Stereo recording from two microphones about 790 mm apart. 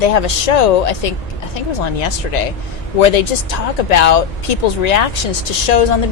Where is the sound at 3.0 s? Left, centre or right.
Left.